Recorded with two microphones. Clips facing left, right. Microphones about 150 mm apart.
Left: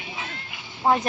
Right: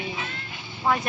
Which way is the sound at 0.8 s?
30° left (ahead or behind).